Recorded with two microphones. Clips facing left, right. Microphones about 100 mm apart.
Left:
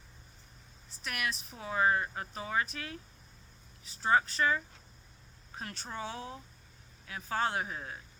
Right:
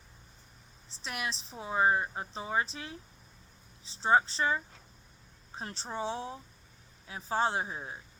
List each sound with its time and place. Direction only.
0.9 s speech: 25° right (ahead or behind)